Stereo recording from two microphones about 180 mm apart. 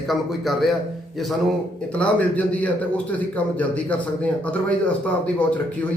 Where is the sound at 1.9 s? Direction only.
5° left (ahead or behind).